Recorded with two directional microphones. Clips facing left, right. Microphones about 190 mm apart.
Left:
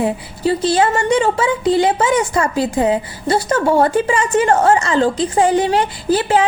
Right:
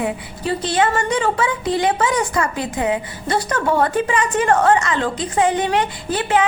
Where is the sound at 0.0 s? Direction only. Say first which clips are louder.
Left 5 dB; 30° left (ahead or behind).